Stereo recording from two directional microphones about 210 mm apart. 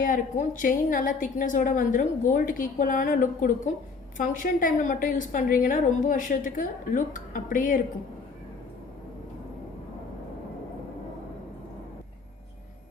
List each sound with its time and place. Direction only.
0.0 s a woman's voice: 40° left (ahead or behind)